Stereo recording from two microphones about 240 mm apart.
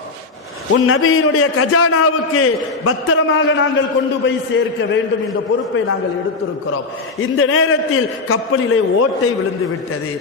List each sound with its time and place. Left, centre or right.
0.7 s a man's voice: left
7.2 s a man's voice: left